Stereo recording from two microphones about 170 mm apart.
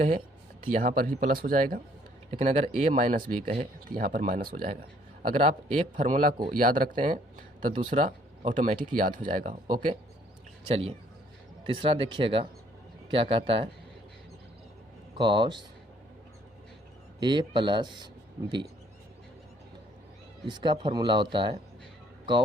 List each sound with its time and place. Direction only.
0.6 s speech: 55° right (ahead or behind)
2.4 s speech: 45° right (ahead or behind)
10.7 s speech: 35° right (ahead or behind)
15.2 s speech: 25° right (ahead or behind)
17.2 s speech: 25° right (ahead or behind)
20.5 s speech: 25° right (ahead or behind)